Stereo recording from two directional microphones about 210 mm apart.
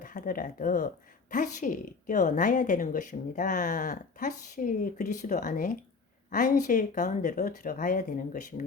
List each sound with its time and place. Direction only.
0.0 s a woman's voice: 40° left (ahead or behind)